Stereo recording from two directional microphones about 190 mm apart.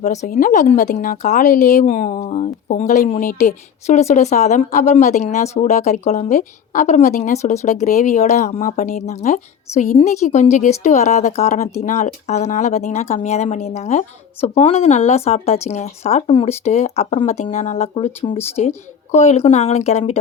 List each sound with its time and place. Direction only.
0.0 s speech: 35° left (ahead or behind)